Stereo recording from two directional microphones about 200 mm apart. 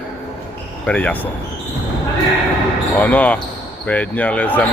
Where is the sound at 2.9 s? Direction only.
5° left (ahead or behind).